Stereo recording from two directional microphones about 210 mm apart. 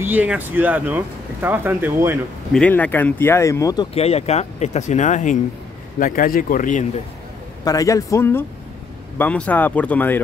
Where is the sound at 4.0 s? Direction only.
30° left (ahead or behind).